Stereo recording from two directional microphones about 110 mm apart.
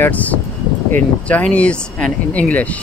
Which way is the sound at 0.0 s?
15° left (ahead or behind).